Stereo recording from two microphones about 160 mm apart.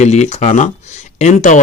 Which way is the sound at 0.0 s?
45° left (ahead or behind).